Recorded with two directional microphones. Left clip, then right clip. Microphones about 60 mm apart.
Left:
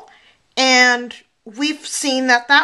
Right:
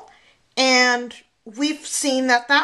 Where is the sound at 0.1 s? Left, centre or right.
Left.